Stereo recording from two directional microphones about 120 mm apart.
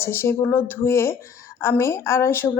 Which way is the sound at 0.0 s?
20° left (ahead or behind).